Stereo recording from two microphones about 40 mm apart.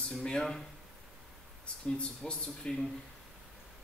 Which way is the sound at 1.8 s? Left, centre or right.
Left.